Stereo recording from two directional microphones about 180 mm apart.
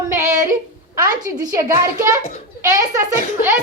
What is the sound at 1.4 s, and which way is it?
A child's voice, 15° right (ahead or behind).